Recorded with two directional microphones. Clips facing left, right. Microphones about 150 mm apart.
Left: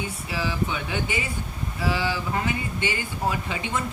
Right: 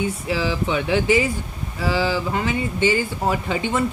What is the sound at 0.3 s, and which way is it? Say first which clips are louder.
Speech: right 3 dB; 75° right (ahead or behind).